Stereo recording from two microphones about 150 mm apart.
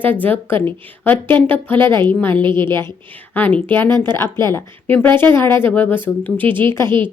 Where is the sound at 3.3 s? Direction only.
10° left (ahead or behind).